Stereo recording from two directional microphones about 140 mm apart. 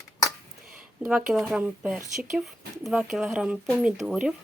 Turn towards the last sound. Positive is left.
turn(degrees=-5)  # may be behind; listen again after turning